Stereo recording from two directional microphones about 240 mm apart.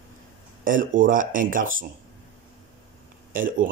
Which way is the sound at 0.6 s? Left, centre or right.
Right.